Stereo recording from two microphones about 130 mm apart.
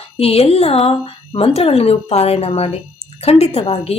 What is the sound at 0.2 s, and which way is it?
Speech, 50° left (ahead or behind).